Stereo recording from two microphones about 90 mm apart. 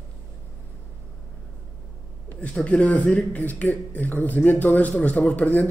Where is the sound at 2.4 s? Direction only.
15° left (ahead or behind).